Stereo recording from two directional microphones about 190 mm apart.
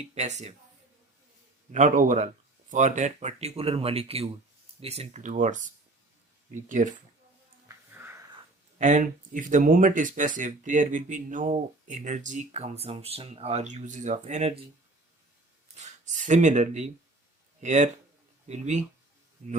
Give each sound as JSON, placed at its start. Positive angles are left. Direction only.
{"t": 0.1, "sound": "speech", "side_deg": -35}
{"t": 1.7, "sound": "speech", "side_deg": -40}
{"t": 7.9, "sound": "a sound", "side_deg": -10}
{"t": 8.8, "sound": "speech", "side_deg": -40}
{"t": 15.7, "sound": "speech", "side_deg": -35}